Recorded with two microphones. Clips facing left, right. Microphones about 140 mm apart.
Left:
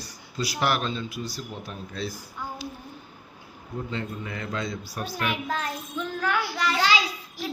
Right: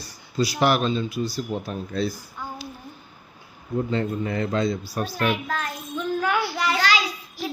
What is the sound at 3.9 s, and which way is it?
A man's voice, 40° right (ahead or behind).